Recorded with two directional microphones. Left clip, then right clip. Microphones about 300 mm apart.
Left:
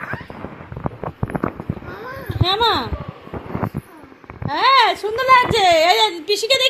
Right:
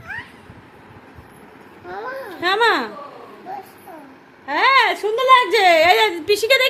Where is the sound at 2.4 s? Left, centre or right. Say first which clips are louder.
Right 1 dB; right.